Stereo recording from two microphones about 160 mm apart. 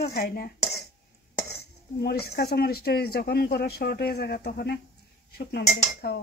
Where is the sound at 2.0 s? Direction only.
85° left.